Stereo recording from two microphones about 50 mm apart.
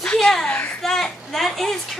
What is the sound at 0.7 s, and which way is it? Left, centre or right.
A woman's voice, centre.